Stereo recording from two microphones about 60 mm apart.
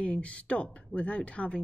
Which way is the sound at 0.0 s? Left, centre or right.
Centre.